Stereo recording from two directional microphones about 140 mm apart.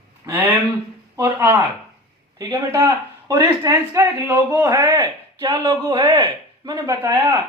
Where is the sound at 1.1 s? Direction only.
20° right (ahead or behind).